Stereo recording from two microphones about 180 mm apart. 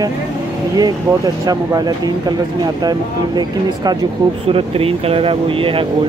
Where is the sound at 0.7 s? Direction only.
20° right (ahead or behind).